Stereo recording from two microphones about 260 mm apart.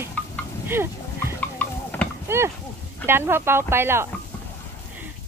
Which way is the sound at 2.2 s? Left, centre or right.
Centre.